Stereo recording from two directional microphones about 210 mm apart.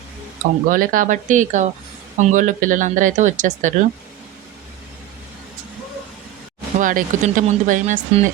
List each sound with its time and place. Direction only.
0.7 s speech: 40° right (ahead or behind)
6.7 s speech: 40° right (ahead or behind)